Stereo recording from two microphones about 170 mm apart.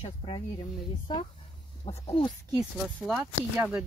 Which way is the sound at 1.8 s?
35° left (ahead or behind).